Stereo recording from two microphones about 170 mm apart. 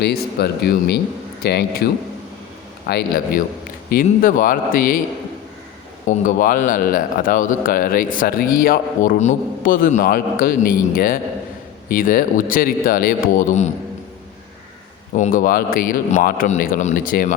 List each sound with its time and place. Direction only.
0.0 s speech: 70° left (ahead or behind); by 4.9 s 55° left (ahead or behind)
6.1 s speech: 50° left (ahead or behind)
15.1 s speech: 50° left (ahead or behind)